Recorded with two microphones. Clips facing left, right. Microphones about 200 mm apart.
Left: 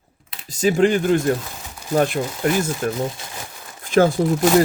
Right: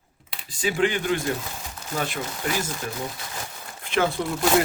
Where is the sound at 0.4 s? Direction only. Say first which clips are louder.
Left 7 dB; 40° left (ahead or behind).